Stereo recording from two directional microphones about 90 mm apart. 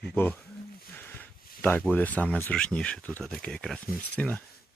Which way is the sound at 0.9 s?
25° left (ahead or behind).